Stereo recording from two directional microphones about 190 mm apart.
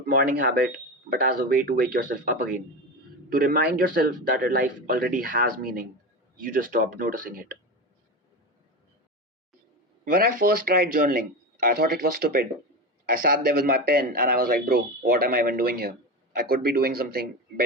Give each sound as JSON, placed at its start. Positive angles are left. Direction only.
{"t": 0.0, "sound": "a man's voice", "side_deg": -50}
{"t": 10.1, "sound": "a man's voice", "side_deg": -50}